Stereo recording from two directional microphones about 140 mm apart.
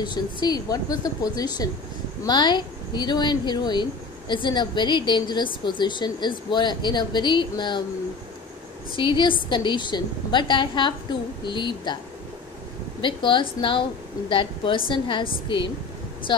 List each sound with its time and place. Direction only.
0.0 s a woman's voice: 30° left (ahead or behind)
8.9 s a woman's voice: 35° left (ahead or behind)
13.0 s a woman's voice: 35° left (ahead or behind)